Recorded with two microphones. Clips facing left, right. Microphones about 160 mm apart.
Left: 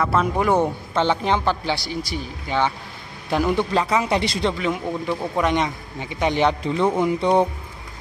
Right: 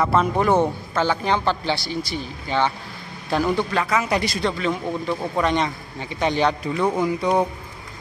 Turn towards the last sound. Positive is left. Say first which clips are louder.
# left 2 dB
turn(degrees=25)  # may be behind; listen again after turning